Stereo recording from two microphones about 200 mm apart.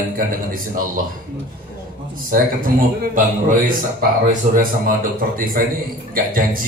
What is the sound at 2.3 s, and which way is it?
Speech, 45° right (ahead or behind).